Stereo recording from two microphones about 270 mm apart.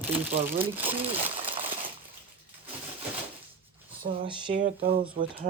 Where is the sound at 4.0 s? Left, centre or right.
Right.